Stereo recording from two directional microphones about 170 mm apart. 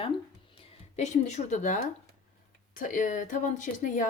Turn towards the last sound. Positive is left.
turn(degrees=45)  # may be behind; listen again after turning